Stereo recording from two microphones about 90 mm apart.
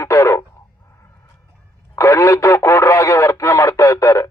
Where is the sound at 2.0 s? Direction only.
35° left (ahead or behind).